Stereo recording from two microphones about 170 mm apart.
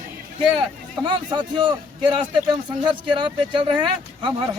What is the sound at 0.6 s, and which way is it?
A man's voice, 30° right (ahead or behind).